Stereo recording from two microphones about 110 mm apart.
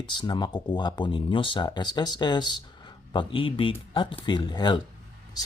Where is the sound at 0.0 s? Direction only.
45° left (ahead or behind).